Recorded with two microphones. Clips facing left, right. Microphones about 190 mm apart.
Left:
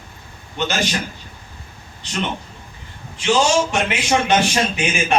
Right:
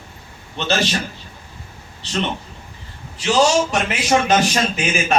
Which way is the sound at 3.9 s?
40° right (ahead or behind).